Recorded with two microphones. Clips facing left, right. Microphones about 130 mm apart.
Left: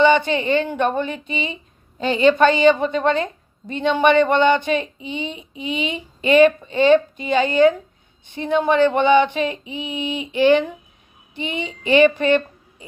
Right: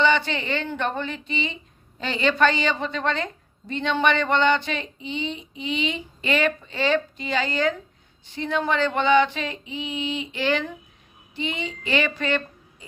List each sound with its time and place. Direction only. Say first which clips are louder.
0.0 s a woman's voice: left 6 dB; 20° left (ahead or behind)
11.3 s child singing: left 3 dB; 20° left (ahead or behind)
12.2 s a woman's voice: left 8 dB; 20° left (ahead or behind)